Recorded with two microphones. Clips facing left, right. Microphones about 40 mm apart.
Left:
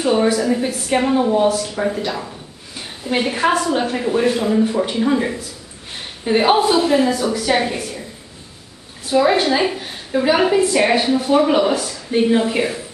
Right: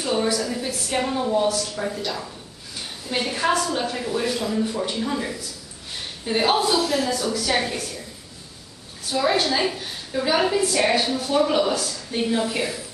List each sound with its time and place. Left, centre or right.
0.0 s a woman's voice: left
9.1 s a woman's voice: centre